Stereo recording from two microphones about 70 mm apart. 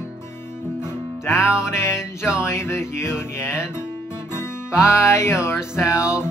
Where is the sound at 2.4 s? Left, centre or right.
Left.